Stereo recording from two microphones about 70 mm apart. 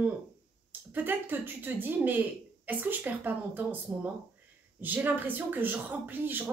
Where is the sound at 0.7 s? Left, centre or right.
Right.